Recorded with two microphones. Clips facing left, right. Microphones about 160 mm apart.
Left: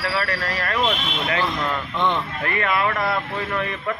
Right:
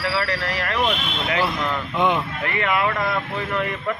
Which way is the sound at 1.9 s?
10° right (ahead or behind).